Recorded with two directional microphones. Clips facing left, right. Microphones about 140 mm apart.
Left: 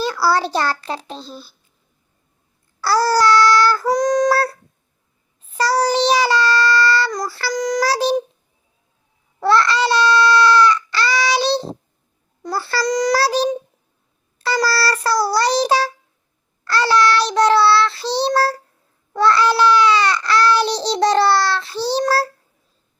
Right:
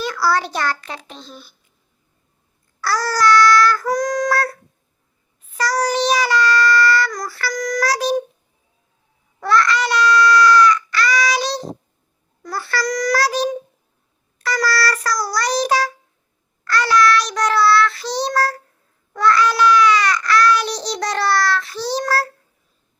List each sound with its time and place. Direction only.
0.0 s a child's voice: 30° left (ahead or behind)
2.8 s child singing: 30° left (ahead or behind)
9.4 s babbling: 30° left (ahead or behind)
12.4 s child singing: 25° left (ahead or behind)